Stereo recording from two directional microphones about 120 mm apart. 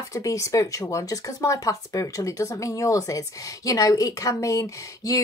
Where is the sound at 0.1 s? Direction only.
25° left (ahead or behind).